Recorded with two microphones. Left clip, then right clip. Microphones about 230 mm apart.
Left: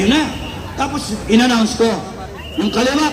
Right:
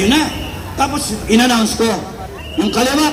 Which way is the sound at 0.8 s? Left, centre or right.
Right.